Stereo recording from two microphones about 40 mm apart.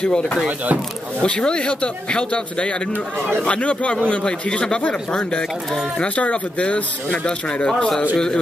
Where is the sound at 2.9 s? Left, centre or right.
Right.